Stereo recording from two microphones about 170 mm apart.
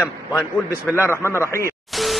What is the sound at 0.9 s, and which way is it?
Speech, 15° left (ahead or behind).